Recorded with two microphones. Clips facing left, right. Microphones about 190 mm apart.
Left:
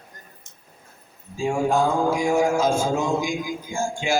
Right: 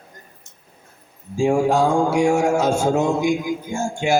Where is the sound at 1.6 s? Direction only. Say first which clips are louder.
Right 3 dB; 75° right (ahead or behind); by 4.1 s 60° right (ahead or behind).